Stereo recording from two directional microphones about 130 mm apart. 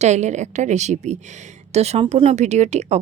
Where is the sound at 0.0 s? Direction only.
60° right (ahead or behind).